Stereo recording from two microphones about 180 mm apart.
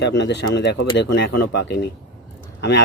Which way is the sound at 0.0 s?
75° left (ahead or behind).